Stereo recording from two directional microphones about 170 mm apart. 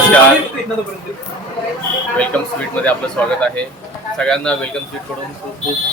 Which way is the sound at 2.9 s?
5° left (ahead or behind).